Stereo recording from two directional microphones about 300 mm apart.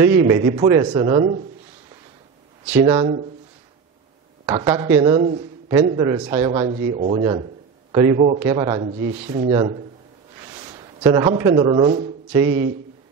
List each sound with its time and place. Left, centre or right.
0.0 s a man's voice: centre
2.6 s a man's voice: centre
4.5 s a man's voice: centre